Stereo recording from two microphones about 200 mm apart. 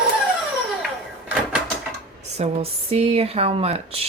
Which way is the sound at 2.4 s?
30° right (ahead or behind).